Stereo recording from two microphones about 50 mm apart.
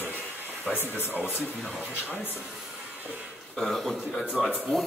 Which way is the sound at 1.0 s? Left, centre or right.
Right.